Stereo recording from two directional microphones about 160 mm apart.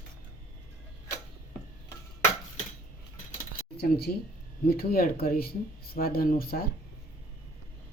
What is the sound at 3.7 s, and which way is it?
Speech, 80° left.